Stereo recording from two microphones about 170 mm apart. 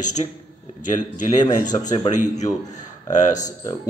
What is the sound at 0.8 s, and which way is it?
Speech, 50° left (ahead or behind).